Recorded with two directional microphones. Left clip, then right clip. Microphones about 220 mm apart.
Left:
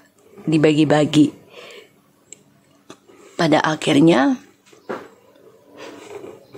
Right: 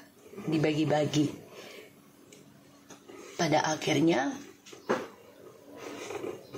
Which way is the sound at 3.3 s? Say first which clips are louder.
Left 10 dB; 50° left (ahead or behind).